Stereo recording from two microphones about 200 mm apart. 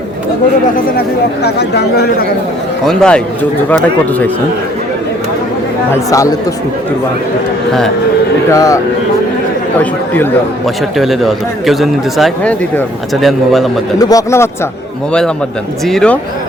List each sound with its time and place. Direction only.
1.5 s a man's voice: 55° left (ahead or behind)
2.8 s speech: 5° left (ahead or behind)
5.9 s speech: 15° left (ahead or behind)
8.5 s speech: 15° left (ahead or behind)
10.9 s speech: centre (ahead or behind)
14.0 s speech: 15° left (ahead or behind)
15.9 s speech: centre (ahead or behind)